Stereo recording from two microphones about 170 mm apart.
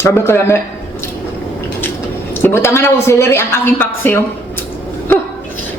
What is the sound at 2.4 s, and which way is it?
A woman's voice, 15° left (ahead or behind).